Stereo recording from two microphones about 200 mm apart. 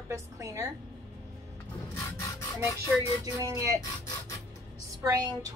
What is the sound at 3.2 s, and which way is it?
Speech, 15° right (ahead or behind).